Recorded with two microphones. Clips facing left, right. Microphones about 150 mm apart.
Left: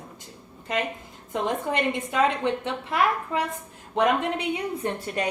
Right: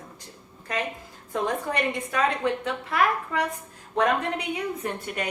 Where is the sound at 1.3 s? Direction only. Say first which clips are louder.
Left 1 dB; 25° left (ahead or behind).